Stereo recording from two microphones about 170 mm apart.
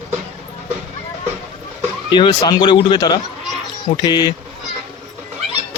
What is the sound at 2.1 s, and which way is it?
Speech, 25° left (ahead or behind).